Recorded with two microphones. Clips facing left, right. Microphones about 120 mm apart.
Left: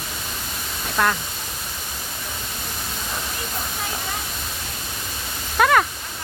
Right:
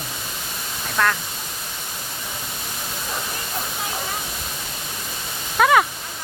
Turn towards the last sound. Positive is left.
turn(degrees=-5)  # may be behind; listen again after turning